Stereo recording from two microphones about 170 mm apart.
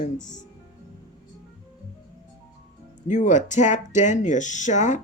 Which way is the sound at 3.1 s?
45° left (ahead or behind).